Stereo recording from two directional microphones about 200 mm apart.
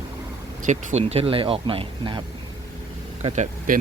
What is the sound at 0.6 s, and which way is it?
Speech, 30° right (ahead or behind).